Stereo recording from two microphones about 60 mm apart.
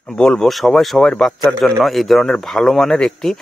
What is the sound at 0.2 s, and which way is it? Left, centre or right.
A man's voice, centre.